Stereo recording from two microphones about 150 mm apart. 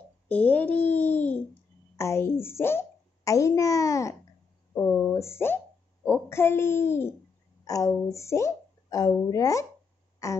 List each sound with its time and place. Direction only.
0.3 s a child's voice: 10° left (ahead or behind)
0.9 s babbling: 10° left (ahead or behind)
2.0 s a child's voice: 20° left (ahead or behind)
4.7 s a sound: 10° left (ahead or behind)
5.1 s a child's voice: 20° left (ahead or behind)
10.2 s a sound: 20° left (ahead or behind)